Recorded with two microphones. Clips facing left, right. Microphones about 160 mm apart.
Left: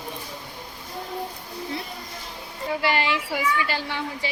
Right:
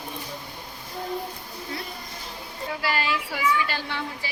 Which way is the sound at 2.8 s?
20° left (ahead or behind).